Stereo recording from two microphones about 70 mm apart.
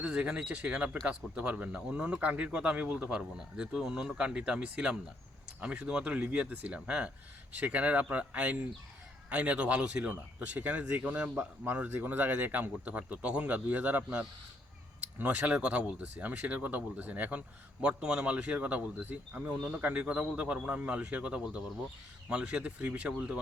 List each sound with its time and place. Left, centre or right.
0.0 s speech: centre